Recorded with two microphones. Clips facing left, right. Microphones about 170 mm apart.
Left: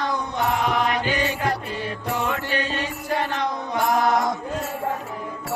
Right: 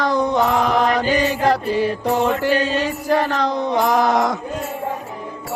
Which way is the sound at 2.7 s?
90° right.